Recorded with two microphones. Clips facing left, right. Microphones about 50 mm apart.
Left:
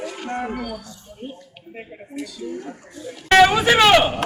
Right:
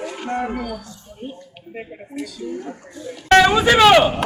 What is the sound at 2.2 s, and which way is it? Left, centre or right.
Speech, right.